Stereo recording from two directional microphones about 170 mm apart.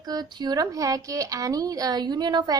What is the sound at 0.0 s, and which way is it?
A woman's voice, 25° right (ahead or behind).